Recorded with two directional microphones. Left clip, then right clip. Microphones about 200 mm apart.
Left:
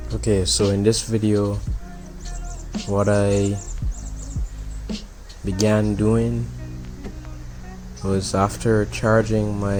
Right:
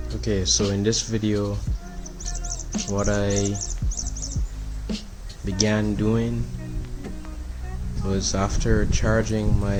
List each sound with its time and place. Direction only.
0.2 s speech: 25° left (ahead or behind)
2.4 s music: 5° right (ahead or behind)
3.0 s speech: 25° left (ahead or behind)
3.5 s music: 5° right (ahead or behind)
5.5 s speech: 25° left (ahead or behind)
8.0 s speech: 25° left (ahead or behind)